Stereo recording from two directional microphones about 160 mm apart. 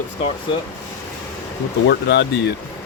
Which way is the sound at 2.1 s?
90° left.